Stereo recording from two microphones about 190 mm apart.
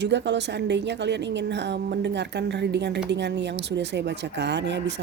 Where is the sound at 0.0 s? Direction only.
65° right (ahead or behind).